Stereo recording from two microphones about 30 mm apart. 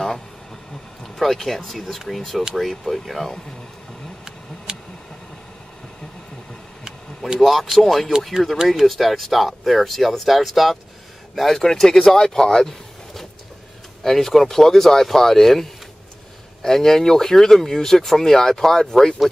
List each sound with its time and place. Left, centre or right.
1.2 s speech: centre
4.7 s a sound: right
7.3 s speech: centre
11.3 s speech: centre
12.4 s a sound: centre
14.0 s speech: centre